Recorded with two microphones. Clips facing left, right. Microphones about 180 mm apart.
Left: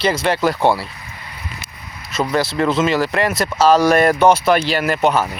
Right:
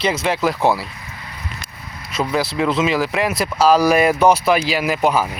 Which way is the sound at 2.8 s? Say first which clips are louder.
Left 1 dB; centre (ahead or behind).